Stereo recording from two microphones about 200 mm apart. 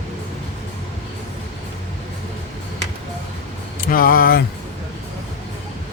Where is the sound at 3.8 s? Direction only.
45° left (ahead or behind).